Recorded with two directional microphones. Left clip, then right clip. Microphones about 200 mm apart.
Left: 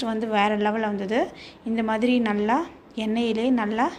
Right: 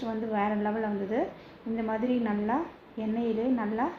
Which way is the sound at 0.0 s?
40° left (ahead or behind).